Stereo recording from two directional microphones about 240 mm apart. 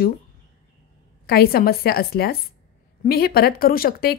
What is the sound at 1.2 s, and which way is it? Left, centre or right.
A woman's voice, left.